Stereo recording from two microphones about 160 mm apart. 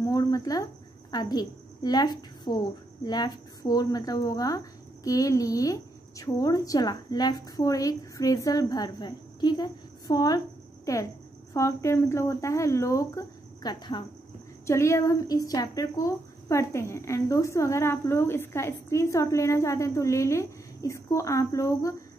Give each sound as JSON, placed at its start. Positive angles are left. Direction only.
{"t": 0.0, "sound": "a woman's voice", "side_deg": 25}